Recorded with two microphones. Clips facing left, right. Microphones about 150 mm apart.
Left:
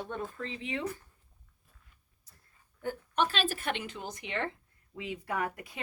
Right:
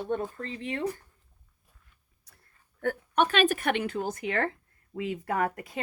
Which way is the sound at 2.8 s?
65° right (ahead or behind).